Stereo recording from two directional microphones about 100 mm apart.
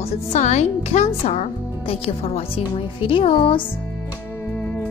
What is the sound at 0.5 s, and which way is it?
Speech, 90° left.